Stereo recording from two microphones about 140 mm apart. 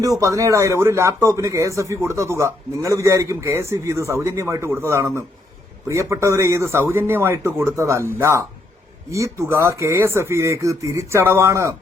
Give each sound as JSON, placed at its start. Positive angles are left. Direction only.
{"t": 0.0, "sound": "speech", "side_deg": -25}